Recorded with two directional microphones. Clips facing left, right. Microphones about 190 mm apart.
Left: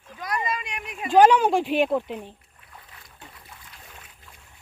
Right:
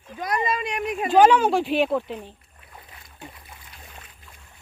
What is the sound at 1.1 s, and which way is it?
Speech, 15° left (ahead or behind).